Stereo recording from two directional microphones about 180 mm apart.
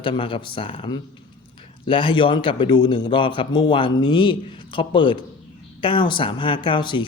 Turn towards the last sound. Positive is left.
turn(degrees=25)  # may be behind; listen again after turning